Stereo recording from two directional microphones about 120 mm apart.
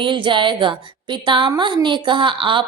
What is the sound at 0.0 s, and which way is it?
A woman's voice, 45° right (ahead or behind).